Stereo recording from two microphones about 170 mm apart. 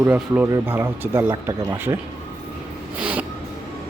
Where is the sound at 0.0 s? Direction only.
10° right (ahead or behind).